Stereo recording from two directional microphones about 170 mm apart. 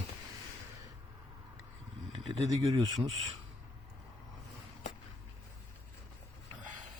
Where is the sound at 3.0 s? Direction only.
Centre (ahead or behind).